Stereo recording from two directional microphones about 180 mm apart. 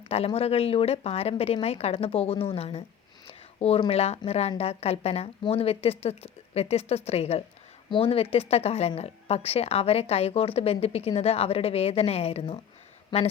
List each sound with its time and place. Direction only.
0.1 s a woman's voice: 35° left (ahead or behind)